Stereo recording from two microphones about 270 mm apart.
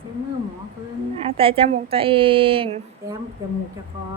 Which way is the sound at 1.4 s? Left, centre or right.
Centre.